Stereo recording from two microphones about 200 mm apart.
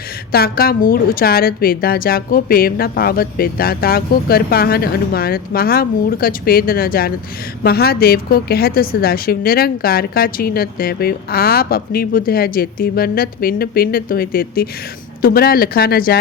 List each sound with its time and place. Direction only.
0.3 s a woman's voice: 50° left (ahead or behind)